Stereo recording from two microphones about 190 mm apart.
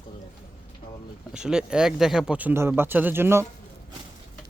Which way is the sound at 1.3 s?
5° right (ahead or behind).